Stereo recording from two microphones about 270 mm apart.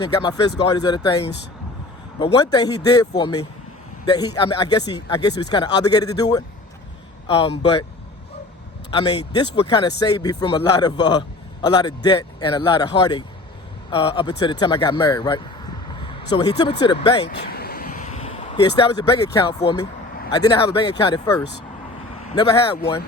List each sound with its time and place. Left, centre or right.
0.0 s a man's voice: centre
8.9 s a man's voice: centre
17.2 s a man's voice: left; by 22.8 s centre